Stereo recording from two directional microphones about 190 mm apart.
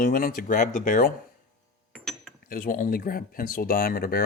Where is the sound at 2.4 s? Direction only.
50° left (ahead or behind).